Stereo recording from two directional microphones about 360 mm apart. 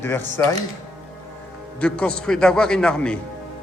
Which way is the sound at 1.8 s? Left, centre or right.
Centre.